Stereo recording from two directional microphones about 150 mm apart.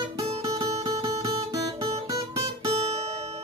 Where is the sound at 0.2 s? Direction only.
40° right (ahead or behind).